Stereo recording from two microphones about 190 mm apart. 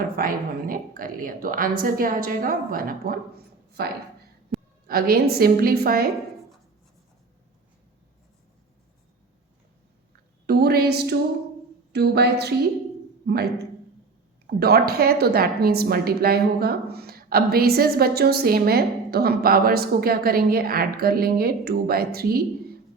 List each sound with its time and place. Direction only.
0.0 s a woman's voice: 50° right (ahead or behind)
4.5 s a sound: centre (ahead or behind)
4.9 s a woman's voice: 50° right (ahead or behind)
10.4 s a woman's voice: 55° right (ahead or behind)